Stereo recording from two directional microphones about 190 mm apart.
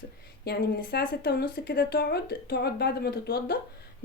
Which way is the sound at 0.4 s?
55° left (ahead or behind).